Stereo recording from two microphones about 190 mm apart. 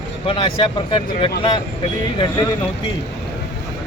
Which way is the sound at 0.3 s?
30° left (ahead or behind).